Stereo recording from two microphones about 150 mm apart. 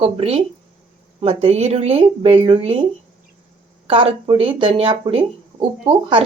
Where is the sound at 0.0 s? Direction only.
40° right (ahead or behind).